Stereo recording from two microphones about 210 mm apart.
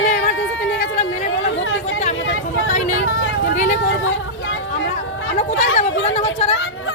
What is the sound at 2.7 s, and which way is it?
Speech, 35° left (ahead or behind).